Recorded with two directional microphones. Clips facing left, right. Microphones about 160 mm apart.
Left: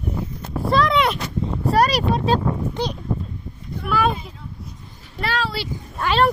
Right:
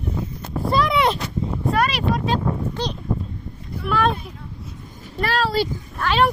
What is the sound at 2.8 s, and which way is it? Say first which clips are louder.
Speech: left 1 dB; 10° left (ahead or behind).